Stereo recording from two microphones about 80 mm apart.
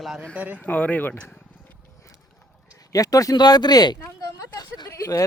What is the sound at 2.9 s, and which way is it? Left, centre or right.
Speech, left.